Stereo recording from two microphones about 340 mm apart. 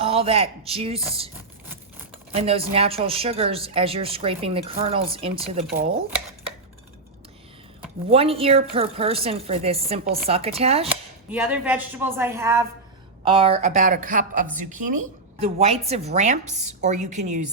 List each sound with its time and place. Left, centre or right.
0.0 s speech: centre
2.3 s speech: centre
8.1 s speech: centre
11.3 s a woman's voice: centre; by 17.5 s right